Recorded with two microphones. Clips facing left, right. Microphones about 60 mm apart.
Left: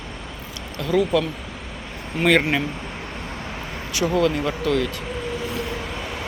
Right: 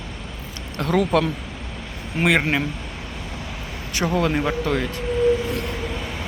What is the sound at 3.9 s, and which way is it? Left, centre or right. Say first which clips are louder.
Speech: left 1 dB; right.